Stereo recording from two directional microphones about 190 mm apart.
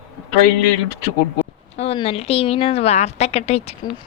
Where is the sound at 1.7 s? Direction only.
30° left (ahead or behind).